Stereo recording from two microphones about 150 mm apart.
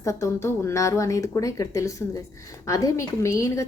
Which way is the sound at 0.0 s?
20° left (ahead or behind).